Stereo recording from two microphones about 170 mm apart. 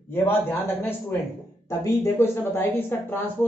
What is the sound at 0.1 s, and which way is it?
A woman's voice, 10° left (ahead or behind).